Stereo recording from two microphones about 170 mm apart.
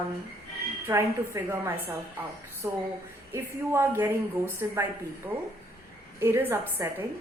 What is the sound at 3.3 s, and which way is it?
A woman's voice, 15° right (ahead or behind).